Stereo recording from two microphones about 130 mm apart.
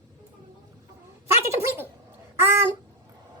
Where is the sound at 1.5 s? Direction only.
20° right (ahead or behind).